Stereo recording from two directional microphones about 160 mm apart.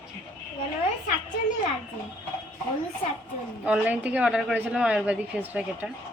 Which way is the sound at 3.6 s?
10° right (ahead or behind).